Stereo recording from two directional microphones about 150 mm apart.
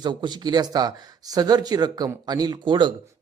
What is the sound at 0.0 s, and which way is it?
Speech, 30° right (ahead or behind).